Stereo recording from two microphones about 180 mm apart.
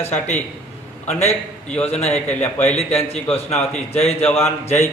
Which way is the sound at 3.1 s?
35° left (ahead or behind).